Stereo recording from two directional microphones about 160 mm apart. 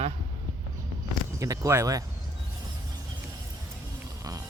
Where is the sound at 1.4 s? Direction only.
20° right (ahead or behind).